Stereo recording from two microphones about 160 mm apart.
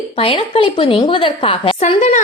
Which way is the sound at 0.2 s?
35° left (ahead or behind).